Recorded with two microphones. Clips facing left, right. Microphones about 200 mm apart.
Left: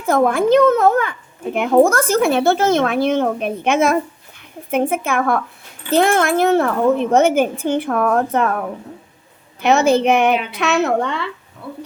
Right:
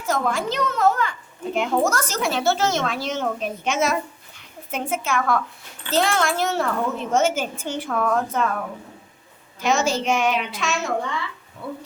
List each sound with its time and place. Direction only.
0.0 s speech: 55° left (ahead or behind)